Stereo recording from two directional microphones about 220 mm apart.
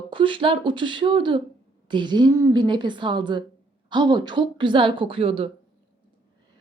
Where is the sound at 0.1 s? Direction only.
20° right (ahead or behind).